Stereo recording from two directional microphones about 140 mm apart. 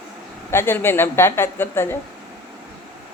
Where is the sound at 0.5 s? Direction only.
15° left (ahead or behind).